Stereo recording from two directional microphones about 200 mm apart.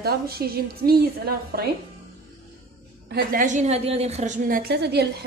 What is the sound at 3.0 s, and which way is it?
A woman's voice, 50° right (ahead or behind).